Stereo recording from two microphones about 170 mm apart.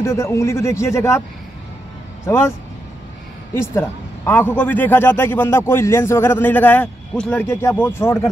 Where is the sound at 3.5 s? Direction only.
15° left (ahead or behind).